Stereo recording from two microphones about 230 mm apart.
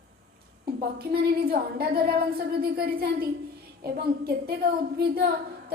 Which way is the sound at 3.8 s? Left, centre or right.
Right.